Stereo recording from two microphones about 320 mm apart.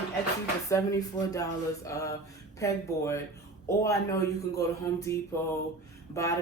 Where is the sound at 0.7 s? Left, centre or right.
Centre.